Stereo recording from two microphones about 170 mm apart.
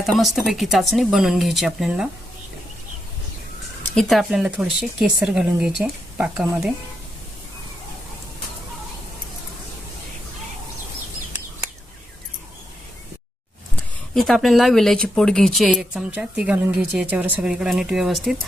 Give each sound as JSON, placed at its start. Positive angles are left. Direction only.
{"t": 0.0, "sound": "speech", "side_deg": 0}
{"t": 3.9, "sound": "speech", "side_deg": 0}
{"t": 14.1, "sound": "speech", "side_deg": 0}